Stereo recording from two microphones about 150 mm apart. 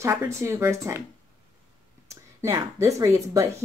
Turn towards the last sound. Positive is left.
turn(degrees=-20)  # may be behind; listen again after turning